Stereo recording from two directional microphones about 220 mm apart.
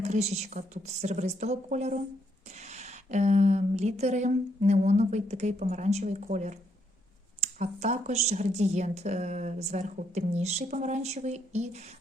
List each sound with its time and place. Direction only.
0.0 s speech: 30° right (ahead or behind)